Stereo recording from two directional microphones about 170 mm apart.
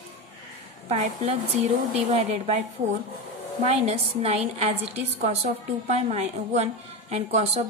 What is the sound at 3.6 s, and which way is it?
A woman's voice, 35° right (ahead or behind).